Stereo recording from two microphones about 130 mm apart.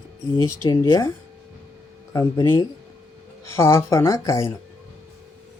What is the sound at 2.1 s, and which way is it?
Speech, 25° left (ahead or behind).